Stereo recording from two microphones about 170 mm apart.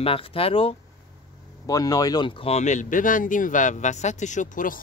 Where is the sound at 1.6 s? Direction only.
20° left (ahead or behind).